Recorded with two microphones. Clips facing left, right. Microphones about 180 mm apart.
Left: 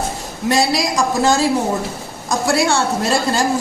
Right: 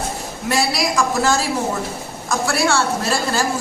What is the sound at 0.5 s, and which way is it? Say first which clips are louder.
Speech: left 2 dB; 20° left (ahead or behind).